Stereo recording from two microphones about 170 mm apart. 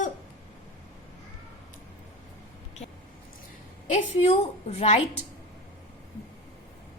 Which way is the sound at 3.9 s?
40° left (ahead or behind).